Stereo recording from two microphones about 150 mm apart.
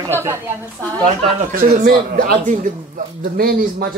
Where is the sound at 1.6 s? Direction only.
75° right (ahead or behind).